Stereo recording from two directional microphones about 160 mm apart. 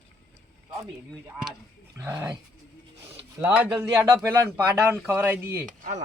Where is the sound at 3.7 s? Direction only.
20° right (ahead or behind).